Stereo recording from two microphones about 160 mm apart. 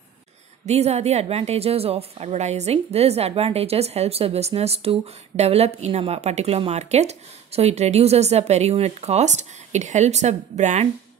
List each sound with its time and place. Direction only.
0.7 s a woman's voice: 40° right (ahead or behind)